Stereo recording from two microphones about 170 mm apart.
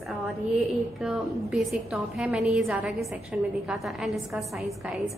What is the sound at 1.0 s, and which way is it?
A woman's voice, 5° right (ahead or behind).